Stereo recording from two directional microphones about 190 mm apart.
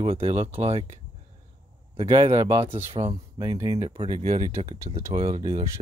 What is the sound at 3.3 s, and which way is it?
Speech, 20° right (ahead or behind).